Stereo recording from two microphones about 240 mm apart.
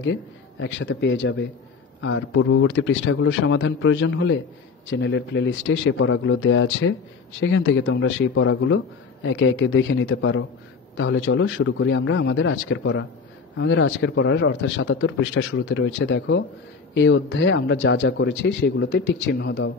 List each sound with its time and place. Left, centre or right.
0.1 s speech: left